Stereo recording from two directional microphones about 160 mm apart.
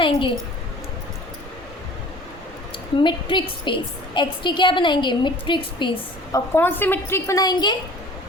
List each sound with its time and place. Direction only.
0.0 s a woman's voice: 30° left (ahead or behind)
3.0 s a woman's voice: 30° left (ahead or behind)
6.3 s a woman's voice: 15° left (ahead or behind)